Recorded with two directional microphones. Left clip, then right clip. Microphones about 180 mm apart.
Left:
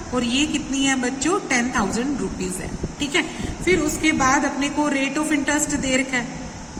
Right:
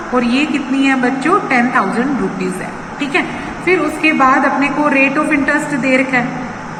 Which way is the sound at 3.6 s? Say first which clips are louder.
Right 6 dB; 90° left.